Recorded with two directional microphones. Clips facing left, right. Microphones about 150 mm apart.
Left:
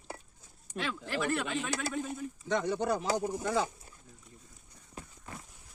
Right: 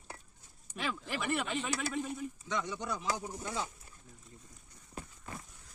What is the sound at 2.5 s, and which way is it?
Speech, 55° left (ahead or behind).